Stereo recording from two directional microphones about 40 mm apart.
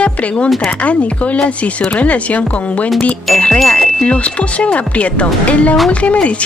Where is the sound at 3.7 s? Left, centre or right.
Left.